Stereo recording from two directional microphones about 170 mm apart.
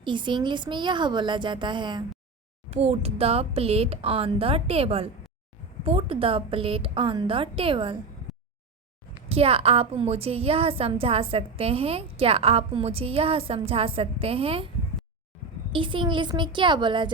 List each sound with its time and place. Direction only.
0.0 s a woman's voice: 30° right (ahead or behind)
2.6 s a woman's voice: 40° right (ahead or behind)
8.3 s a sound: centre (ahead or behind)
9.3 s a woman's voice: 35° right (ahead or behind)
15.7 s a woman's voice: 30° right (ahead or behind)